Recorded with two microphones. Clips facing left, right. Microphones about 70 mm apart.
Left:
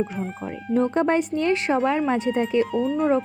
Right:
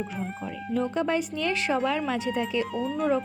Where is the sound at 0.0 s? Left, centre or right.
Centre.